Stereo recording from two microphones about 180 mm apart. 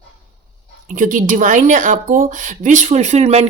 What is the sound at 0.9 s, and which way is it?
Speech, 45° right (ahead or behind).